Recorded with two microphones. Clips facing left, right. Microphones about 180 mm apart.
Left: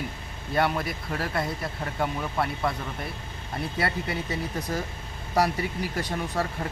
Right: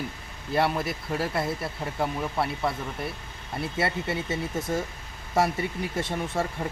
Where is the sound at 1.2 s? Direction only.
25° right (ahead or behind).